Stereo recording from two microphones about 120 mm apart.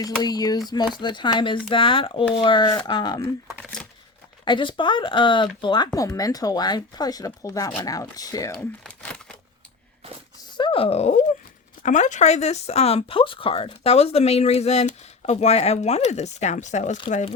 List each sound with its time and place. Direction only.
0.0 s speech: 35° left (ahead or behind)
3.6 s a sound: 5° left (ahead or behind)
4.4 s speech: 40° left (ahead or behind)
8.5 s a sound: 5° left (ahead or behind)
10.6 s speech: 50° left (ahead or behind)
11.8 s speech: 90° left